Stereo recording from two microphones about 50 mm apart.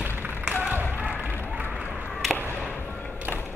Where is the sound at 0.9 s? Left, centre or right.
Right.